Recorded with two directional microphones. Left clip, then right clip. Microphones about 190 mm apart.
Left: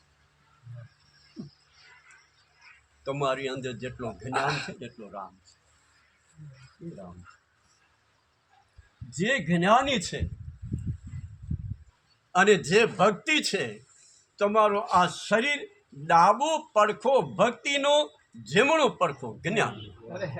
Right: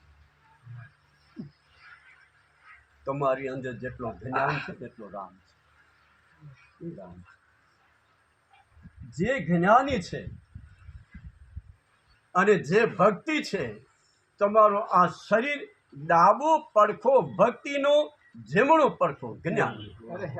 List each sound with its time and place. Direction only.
3.0 s a man's voice: 15° left (ahead or behind)
4.3 s speech: 75° left (ahead or behind)
9.0 s speech: 10° left (ahead or behind)
12.3 s speech: 15° left (ahead or behind)
14.8 s speech: 30° left (ahead or behind)
15.0 s speech: 15° left (ahead or behind)